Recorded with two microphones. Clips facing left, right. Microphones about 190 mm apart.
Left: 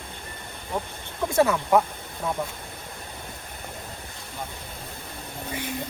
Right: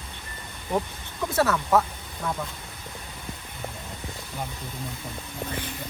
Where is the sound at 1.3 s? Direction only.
15° left (ahead or behind).